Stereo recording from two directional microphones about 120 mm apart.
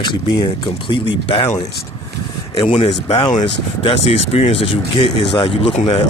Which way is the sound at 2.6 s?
45° left (ahead or behind).